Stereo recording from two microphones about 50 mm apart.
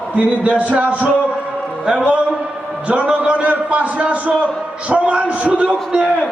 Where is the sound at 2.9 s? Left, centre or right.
Right.